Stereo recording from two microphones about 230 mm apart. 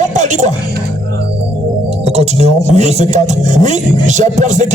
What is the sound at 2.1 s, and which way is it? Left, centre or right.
Speech, right.